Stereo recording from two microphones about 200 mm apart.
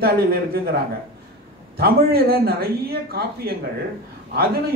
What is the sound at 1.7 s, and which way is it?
Speech, 50° right (ahead or behind).